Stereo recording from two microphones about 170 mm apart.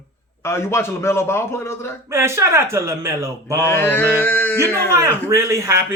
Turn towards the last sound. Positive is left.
turn(degrees=-15)  # may be behind; listen again after turning